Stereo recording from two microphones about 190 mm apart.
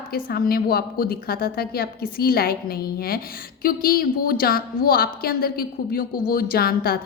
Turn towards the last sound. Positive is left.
turn(degrees=55)  # may be behind; listen again after turning